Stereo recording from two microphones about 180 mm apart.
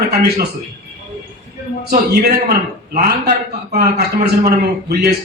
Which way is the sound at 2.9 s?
55° right (ahead or behind).